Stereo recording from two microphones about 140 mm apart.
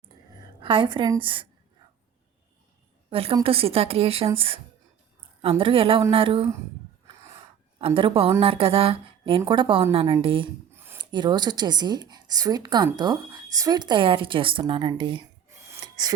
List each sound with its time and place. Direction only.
0.6 s a woman's voice: 40° right (ahead or behind)
3.1 s a woman's voice: 45° right (ahead or behind)
7.8 s a woman's voice: 40° right (ahead or behind)
10.7 s a sound: 15° right (ahead or behind)
11.1 s a woman's voice: 35° right (ahead or behind)
15.8 s a sound: 25° right (ahead or behind)